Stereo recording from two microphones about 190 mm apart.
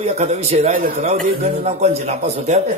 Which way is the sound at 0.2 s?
35° right (ahead or behind).